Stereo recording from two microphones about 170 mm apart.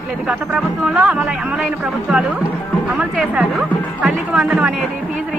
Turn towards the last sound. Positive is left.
turn(degrees=-5)  # may be behind; listen again after turning